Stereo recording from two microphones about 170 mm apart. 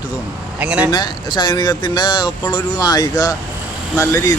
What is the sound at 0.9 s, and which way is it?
Speech, 25° left (ahead or behind).